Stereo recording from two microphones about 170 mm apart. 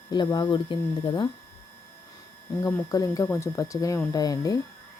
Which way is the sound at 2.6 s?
15° left (ahead or behind).